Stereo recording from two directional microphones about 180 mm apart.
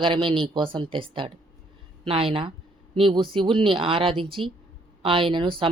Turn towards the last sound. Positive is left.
turn(degrees=-30)  # may be behind; listen again after turning